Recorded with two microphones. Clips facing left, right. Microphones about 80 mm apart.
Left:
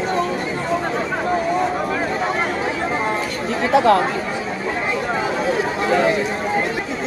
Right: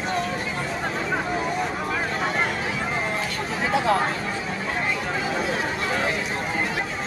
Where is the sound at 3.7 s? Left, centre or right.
Left.